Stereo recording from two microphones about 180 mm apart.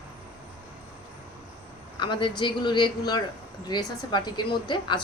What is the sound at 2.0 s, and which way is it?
A woman's voice, 25° left (ahead or behind).